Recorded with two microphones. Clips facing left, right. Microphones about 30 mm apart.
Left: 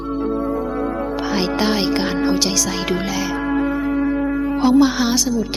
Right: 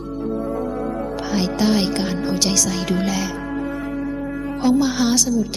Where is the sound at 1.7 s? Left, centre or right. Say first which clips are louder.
Left 2 dB; centre.